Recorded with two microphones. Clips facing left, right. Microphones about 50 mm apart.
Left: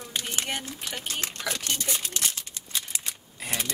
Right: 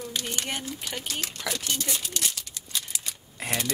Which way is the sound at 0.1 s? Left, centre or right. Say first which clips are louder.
Left 4 dB; left.